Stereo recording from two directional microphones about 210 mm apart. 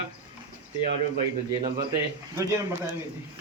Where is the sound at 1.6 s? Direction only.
20° right (ahead or behind).